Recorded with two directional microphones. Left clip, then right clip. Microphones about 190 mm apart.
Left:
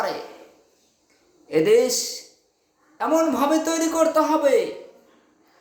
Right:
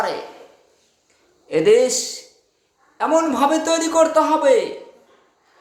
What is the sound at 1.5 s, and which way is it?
Speech, 5° right (ahead or behind).